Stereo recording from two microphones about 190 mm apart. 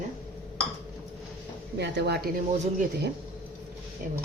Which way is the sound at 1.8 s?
60° right (ahead or behind).